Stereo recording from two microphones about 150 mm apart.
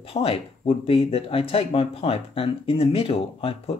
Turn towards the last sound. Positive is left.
turn(degrees=40)  # may be behind; listen again after turning